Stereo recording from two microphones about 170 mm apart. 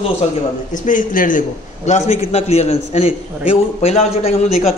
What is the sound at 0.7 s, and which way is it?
A man's voice, 50° left (ahead or behind).